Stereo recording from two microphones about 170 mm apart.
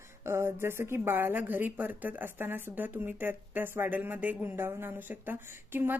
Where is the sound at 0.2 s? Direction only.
15° right (ahead or behind).